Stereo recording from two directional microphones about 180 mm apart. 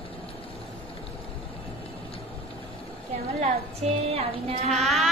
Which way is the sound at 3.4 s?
35° right (ahead or behind).